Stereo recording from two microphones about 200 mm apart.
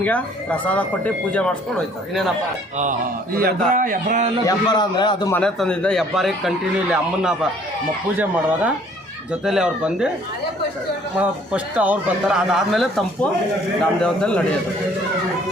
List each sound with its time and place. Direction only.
0.0 s speech: 5° left (ahead or behind)
3.7 s a man's voice: 45° right (ahead or behind)
4.4 s a man's voice: 20° left (ahead or behind)
5.3 s a man's voice: 5° left (ahead or behind)
11.2 s a man's voice: 5° right (ahead or behind)